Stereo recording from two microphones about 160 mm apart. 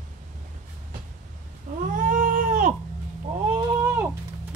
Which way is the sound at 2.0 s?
55° right (ahead or behind).